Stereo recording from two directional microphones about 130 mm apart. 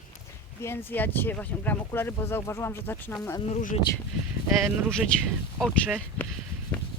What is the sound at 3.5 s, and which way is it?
Speech, 90° left.